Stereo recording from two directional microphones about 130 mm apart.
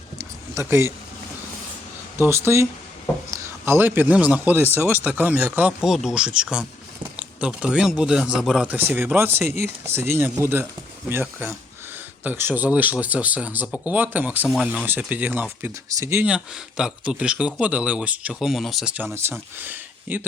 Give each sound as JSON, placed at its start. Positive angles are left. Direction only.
{"t": 0.5, "sound": "speech", "side_deg": -20}
{"t": 2.1, "sound": "a man's voice", "side_deg": -20}
{"t": 14.4, "sound": "a man's voice", "side_deg": 0}
{"t": 16.2, "sound": "a man's voice", "side_deg": -5}
{"t": 19.1, "sound": "a man's voice", "side_deg": -20}